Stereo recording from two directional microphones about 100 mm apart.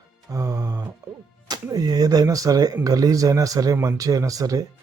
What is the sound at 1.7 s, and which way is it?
Speech, 40° right (ahead or behind).